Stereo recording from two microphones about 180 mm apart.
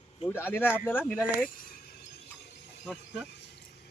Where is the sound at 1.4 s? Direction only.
55° left (ahead or behind).